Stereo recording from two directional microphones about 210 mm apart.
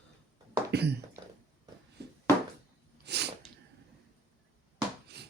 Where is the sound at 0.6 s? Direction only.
50° right (ahead or behind).